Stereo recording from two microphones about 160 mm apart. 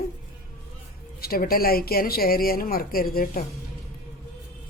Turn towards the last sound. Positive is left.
turn(degrees=65)  # may be behind; listen again after turning